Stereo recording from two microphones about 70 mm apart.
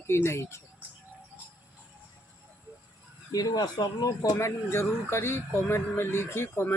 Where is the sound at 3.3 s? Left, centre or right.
Left.